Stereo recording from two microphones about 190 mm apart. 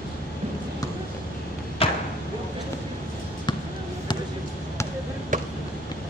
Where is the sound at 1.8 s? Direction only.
30° left (ahead or behind).